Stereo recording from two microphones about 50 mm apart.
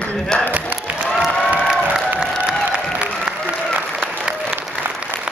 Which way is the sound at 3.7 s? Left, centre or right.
Right.